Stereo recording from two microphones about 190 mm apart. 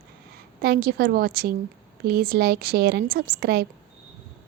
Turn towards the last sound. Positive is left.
turn(degrees=-55)  # may be behind; listen again after turning